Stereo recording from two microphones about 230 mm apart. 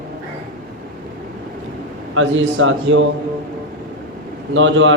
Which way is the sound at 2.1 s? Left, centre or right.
Right.